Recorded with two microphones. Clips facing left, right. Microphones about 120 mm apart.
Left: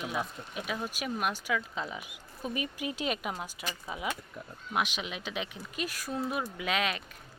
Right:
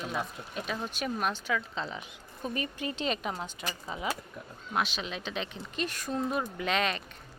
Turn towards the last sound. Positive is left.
turn(degrees=5)  # may be behind; listen again after turning